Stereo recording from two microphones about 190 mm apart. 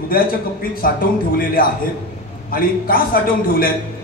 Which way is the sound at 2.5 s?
50° left (ahead or behind).